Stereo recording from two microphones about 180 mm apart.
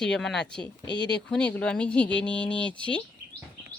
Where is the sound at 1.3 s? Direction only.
5° left (ahead or behind).